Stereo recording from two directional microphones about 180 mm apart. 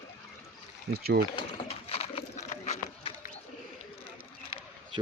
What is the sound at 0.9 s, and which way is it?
Speech, 60° right (ahead or behind).